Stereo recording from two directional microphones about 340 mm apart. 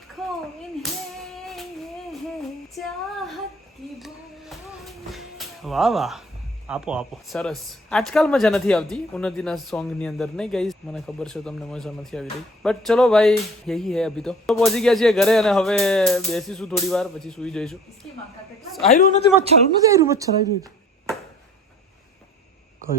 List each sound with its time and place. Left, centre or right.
0.2 s a sound: centre
4.0 s music: centre
6.7 s speech: centre
18.8 s a man's voice: centre
19.5 s a woman's voice: centre